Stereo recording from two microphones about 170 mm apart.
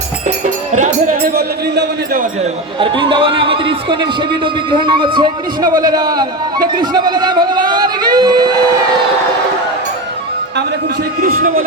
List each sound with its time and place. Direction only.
0.8 s speech: 45° right (ahead or behind); by 2.2 s 75° right (ahead or behind)
2.4 s speech: 30° right (ahead or behind)
11.2 s speech: 55° right (ahead or behind)